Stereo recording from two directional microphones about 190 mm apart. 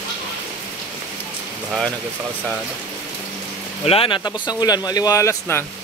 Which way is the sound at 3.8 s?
30° left (ahead or behind).